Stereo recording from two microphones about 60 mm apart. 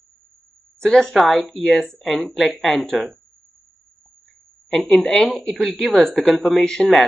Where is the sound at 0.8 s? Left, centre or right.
Centre.